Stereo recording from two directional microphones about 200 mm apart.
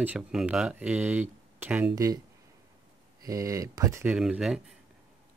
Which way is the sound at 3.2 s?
15° right (ahead or behind).